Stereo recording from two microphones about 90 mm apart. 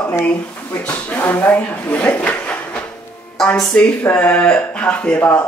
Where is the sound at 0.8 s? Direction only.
20° left (ahead or behind).